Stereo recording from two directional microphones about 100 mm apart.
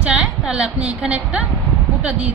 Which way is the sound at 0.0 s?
10° right (ahead or behind).